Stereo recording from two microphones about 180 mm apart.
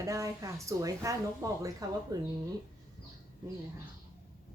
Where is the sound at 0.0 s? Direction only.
20° right (ahead or behind).